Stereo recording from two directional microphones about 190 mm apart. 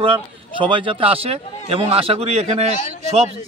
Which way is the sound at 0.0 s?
25° right (ahead or behind).